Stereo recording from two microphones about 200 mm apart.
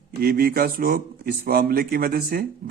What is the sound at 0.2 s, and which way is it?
Speech, 50° right (ahead or behind).